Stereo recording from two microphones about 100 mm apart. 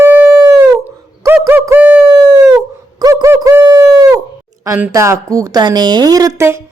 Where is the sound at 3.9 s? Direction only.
35° right (ahead or behind).